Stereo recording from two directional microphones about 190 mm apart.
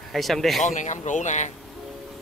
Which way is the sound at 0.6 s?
40° left (ahead or behind).